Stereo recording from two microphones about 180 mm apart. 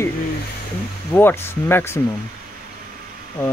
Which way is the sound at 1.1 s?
10° left (ahead or behind).